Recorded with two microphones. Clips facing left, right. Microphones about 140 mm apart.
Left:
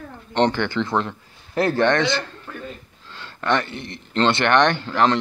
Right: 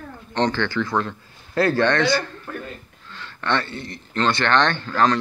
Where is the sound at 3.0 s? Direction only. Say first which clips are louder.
Even; 25° left (ahead or behind).